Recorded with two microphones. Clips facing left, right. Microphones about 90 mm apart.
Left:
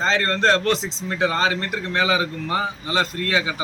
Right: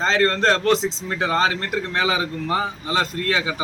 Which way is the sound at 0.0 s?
30° right (ahead or behind).